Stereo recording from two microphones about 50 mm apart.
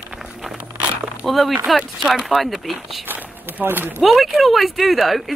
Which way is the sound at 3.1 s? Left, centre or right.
Right.